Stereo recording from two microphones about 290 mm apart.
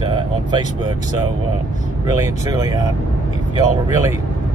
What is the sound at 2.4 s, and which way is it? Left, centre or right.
Speech, centre.